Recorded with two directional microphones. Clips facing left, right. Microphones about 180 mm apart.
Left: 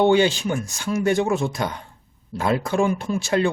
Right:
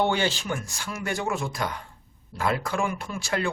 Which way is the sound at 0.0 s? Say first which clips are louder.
Left 8 dB; 15° left (ahead or behind).